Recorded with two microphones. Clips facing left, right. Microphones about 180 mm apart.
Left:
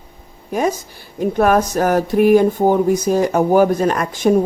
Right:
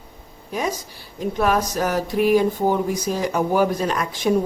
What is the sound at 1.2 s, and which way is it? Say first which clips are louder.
Speech: left 6 dB; 50° left (ahead or behind).